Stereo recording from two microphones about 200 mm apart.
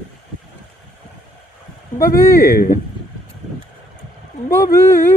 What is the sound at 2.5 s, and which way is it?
Speech, 45° left (ahead or behind).